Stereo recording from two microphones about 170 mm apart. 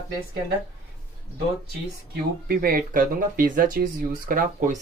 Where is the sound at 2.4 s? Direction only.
60° right (ahead or behind).